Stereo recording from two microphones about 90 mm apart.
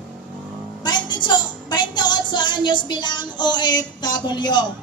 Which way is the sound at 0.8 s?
55° left (ahead or behind).